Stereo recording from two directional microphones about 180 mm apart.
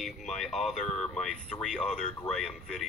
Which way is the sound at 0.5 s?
40° left (ahead or behind).